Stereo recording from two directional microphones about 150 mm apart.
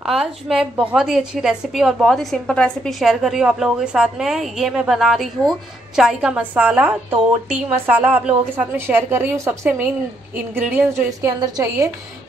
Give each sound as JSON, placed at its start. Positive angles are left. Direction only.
{"t": 0.0, "sound": "a woman's voice", "side_deg": -5}